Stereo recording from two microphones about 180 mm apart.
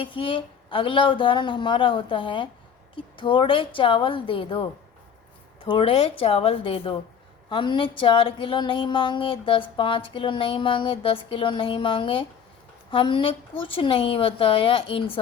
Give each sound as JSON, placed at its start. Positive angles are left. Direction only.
{"t": 0.0, "sound": "speech", "side_deg": 30}
{"t": 5.6, "sound": "a woman's voice", "side_deg": 30}